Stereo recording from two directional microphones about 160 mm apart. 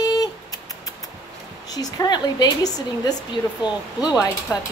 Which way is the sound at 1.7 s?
25° left (ahead or behind).